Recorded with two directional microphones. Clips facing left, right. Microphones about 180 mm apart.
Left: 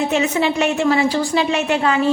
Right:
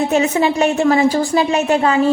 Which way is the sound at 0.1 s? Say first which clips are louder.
Right 3 dB; 40° right (ahead or behind).